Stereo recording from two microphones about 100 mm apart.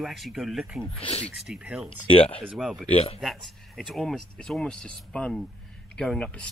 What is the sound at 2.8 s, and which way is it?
Speech, 90° left.